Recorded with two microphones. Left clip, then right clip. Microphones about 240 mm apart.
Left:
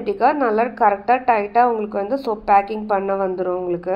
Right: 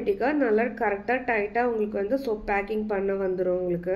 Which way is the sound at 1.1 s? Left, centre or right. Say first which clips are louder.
Left 9 dB; centre.